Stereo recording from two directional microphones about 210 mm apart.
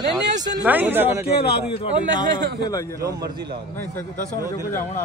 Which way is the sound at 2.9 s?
15° right (ahead or behind).